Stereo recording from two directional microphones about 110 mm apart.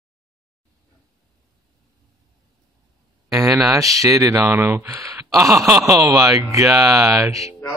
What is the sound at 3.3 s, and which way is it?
Speech, 30° right (ahead or behind).